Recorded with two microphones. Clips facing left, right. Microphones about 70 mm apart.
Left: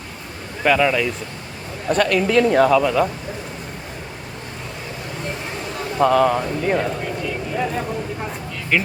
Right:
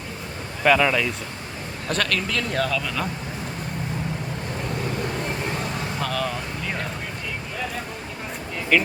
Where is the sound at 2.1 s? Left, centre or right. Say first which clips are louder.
Left 10 dB; left.